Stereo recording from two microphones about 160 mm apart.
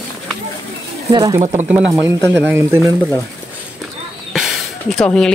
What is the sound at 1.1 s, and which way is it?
Speech, 20° right (ahead or behind).